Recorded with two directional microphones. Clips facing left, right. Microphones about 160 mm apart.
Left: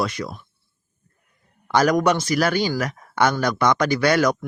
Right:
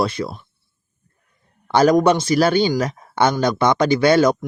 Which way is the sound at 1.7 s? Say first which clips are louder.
Right 4 dB; 30° right (ahead or behind).